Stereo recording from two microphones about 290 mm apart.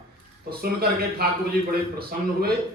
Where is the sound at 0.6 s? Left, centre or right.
Right.